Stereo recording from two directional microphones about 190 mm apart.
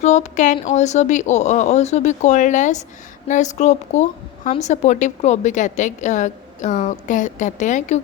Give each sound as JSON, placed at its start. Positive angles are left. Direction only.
{"t": 0.0, "sound": "a woman's voice", "side_deg": 40}